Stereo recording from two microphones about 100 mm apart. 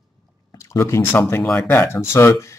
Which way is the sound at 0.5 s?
30° left (ahead or behind).